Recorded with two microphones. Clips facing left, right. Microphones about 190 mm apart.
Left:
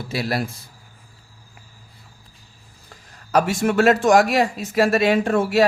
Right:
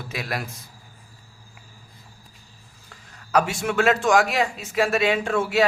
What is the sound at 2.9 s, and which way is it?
A man's voice, 40° left (ahead or behind).